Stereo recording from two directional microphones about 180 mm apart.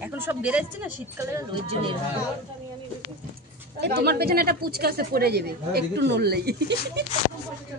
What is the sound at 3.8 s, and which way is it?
A woman's voice, 65° right (ahead or behind).